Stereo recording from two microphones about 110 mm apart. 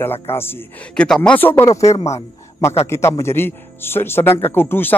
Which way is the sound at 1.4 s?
20° left (ahead or behind).